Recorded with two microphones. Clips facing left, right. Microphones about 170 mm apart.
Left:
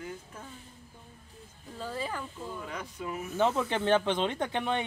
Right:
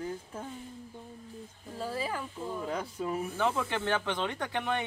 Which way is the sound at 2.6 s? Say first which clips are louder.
Right 8 dB; 30° right (ahead or behind).